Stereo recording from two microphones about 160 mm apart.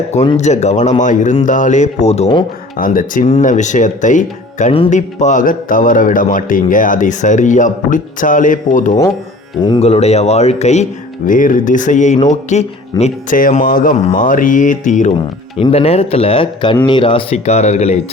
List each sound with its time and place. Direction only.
0.3 s speech: 45° left (ahead or behind)
2.7 s a man's voice: 55° left (ahead or behind)
3.2 s a man's voice: 45° left (ahead or behind)
9.6 s speech: 25° left (ahead or behind)
9.8 s speech: 40° left (ahead or behind)
11.3 s speech: 55° left (ahead or behind)
13.3 s a man's voice: 55° left (ahead or behind)
15.5 s speech: 40° left (ahead or behind)